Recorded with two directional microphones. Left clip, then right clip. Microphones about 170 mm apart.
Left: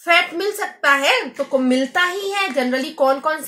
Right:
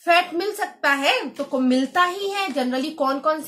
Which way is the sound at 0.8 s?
35° left (ahead or behind).